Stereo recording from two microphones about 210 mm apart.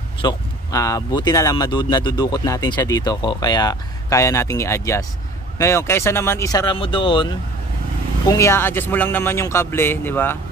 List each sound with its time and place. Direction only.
0.2 s speech: 20° left (ahead or behind)